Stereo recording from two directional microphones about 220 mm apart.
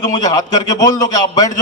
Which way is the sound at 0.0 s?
15° left (ahead or behind).